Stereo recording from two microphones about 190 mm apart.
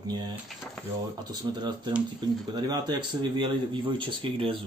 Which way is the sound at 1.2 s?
20° right (ahead or behind).